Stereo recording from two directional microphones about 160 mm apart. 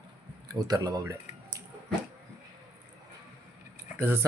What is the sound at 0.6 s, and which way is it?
Speech, 25° right (ahead or behind).